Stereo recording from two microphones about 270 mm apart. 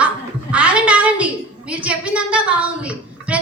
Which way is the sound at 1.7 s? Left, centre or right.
Centre.